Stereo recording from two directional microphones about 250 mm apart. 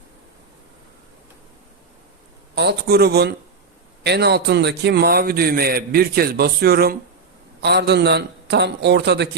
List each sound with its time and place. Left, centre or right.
2.6 s a man's voice: right